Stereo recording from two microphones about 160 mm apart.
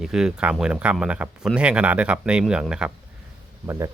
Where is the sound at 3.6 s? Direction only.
20° right (ahead or behind).